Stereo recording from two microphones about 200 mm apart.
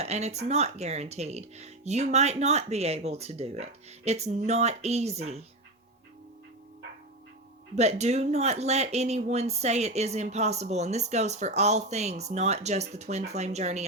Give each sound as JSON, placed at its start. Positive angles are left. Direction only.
{"t": 0.0, "sound": "speech", "side_deg": -35}
{"t": 7.8, "sound": "speech", "side_deg": -35}